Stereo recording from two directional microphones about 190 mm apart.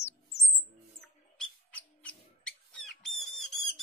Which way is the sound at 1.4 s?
5° left (ahead or behind).